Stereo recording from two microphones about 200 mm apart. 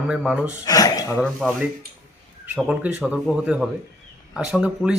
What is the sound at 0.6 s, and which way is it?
Speech, 20° left (ahead or behind).